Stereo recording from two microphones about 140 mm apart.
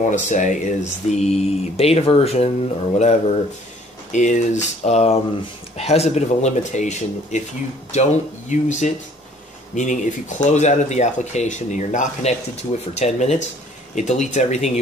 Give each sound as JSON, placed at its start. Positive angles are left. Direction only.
{"t": 0.0, "sound": "speech", "side_deg": 60}